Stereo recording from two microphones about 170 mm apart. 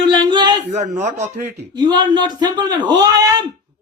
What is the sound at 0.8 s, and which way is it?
Speech, 45° right (ahead or behind).